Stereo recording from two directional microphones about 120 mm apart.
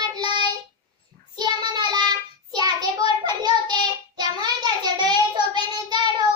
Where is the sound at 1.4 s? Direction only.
35° right (ahead or behind).